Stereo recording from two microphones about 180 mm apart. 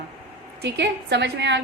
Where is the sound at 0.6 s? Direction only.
75° right (ahead or behind).